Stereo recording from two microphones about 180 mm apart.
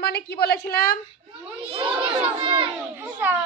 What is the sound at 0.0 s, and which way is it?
Speech, 60° left (ahead or behind).